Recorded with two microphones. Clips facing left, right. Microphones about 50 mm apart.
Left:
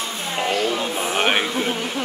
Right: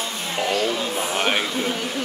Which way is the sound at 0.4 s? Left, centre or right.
Left.